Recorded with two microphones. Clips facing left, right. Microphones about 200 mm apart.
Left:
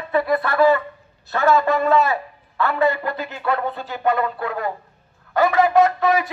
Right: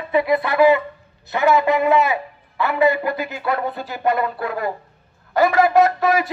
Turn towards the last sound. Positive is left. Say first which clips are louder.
# right 1 dB
turn(degrees=-10)  # may be behind; listen again after turning